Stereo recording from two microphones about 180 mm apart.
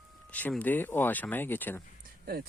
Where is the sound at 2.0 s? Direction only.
55° right (ahead or behind).